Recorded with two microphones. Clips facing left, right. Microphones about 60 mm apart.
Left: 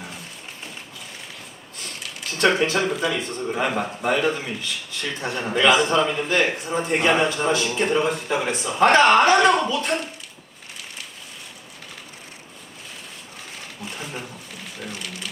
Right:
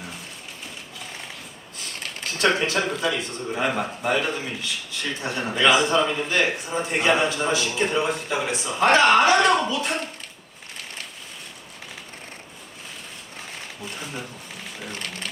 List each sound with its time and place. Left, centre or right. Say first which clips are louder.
2.3 s a man's voice: left 2 dB; centre
14.0 s speech: left 1 dB; centre
14.9 s speech: right 1 dB; right